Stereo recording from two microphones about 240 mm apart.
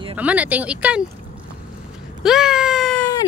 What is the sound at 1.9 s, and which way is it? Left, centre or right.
Wail, centre.